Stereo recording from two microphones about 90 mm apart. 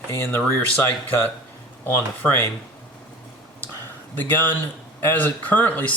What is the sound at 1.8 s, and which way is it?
Speech, 20° left (ahead or behind).